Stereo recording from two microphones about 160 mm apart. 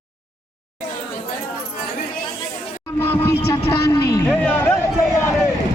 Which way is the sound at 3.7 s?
20° left (ahead or behind).